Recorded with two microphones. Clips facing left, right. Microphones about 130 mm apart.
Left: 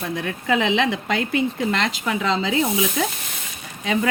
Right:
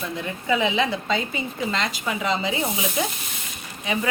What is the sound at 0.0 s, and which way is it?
Speech, 65° left (ahead or behind).